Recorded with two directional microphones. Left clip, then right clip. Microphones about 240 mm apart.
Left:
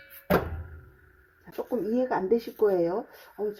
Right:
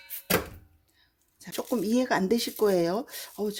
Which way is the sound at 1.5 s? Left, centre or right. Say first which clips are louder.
Right 1 dB; right.